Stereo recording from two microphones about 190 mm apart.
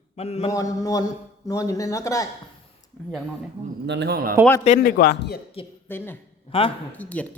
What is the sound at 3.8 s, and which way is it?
Speech, 65° right (ahead or behind).